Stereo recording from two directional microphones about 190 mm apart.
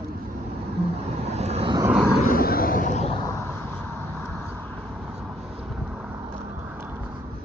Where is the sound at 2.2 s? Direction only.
50° left (ahead or behind).